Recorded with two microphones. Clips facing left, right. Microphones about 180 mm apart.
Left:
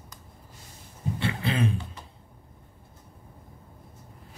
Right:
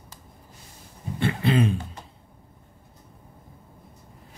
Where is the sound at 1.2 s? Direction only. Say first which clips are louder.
Right 6 dB; 50° right (ahead or behind).